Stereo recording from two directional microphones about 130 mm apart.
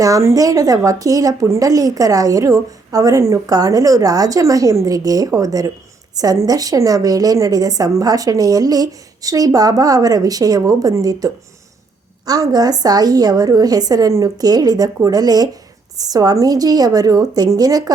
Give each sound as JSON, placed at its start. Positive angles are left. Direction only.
{"t": 0.0, "sound": "a woman's voice", "side_deg": -25}